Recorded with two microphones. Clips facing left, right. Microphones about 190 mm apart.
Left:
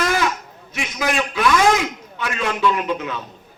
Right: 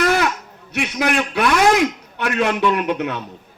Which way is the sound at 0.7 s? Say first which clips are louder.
Right 3 dB; 65° right (ahead or behind).